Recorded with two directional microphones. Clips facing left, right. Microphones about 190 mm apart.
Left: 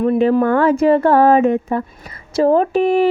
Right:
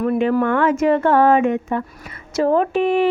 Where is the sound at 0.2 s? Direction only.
35° left (ahead or behind).